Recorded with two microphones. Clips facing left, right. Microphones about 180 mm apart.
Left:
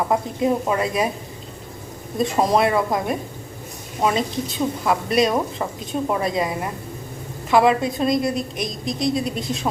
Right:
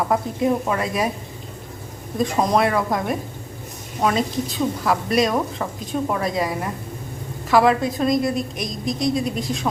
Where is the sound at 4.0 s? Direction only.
Centre (ahead or behind).